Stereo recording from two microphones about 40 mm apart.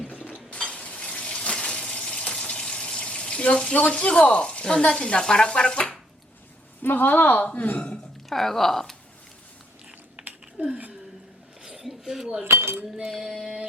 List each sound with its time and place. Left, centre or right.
0.5 s water: left
5.0 s stir: left
6.8 s a woman's voice: left
7.4 s speech: left
8.3 s speech: centre
10.2 s a sound: right
10.6 s speech: right
11.6 s a sound: centre
12.0 s female singing: centre